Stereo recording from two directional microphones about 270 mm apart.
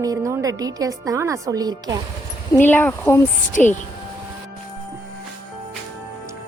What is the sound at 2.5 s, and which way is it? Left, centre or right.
Speech, centre.